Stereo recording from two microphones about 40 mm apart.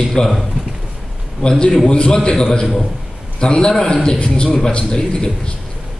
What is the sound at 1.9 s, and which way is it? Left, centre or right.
A man's voice, left.